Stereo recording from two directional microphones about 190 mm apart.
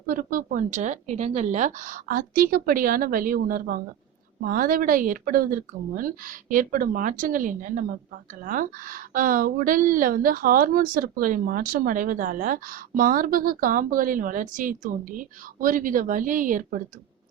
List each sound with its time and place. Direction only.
0.0 s a woman's voice: 45° right (ahead or behind)